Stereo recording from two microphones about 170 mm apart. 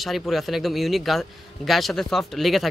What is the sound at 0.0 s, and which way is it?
A man's voice, centre (ahead or behind).